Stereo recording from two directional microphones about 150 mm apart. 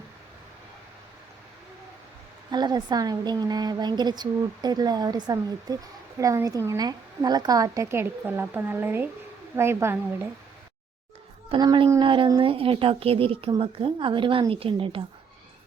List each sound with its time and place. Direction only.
2.5 s a woman's voice: 30° right (ahead or behind)
11.4 s a woman's voice: 30° right (ahead or behind)